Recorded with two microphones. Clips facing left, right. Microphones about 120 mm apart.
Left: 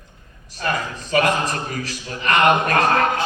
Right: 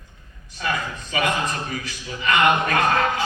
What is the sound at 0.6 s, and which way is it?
Speech, 45° left (ahead or behind).